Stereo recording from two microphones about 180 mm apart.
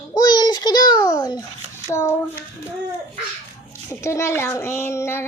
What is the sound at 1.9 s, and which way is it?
Child singing, 15° left (ahead or behind).